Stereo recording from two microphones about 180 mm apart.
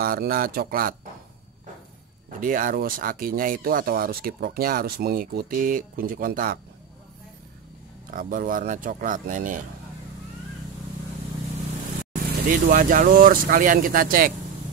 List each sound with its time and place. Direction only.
0.0 s speech: 55° right (ahead or behind)
2.4 s speech: 50° right (ahead or behind)
8.1 s speech: 50° right (ahead or behind)
12.4 s speech: 50° right (ahead or behind)